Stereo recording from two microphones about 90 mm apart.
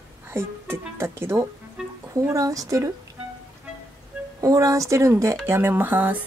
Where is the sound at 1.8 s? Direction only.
10° right (ahead or behind).